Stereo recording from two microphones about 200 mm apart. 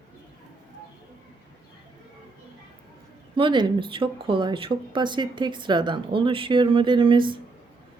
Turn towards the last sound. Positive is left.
turn(degrees=-25)  # may be behind; listen again after turning